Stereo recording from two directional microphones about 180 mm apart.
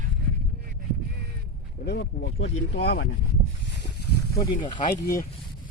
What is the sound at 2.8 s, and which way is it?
Speech, 60° left (ahead or behind).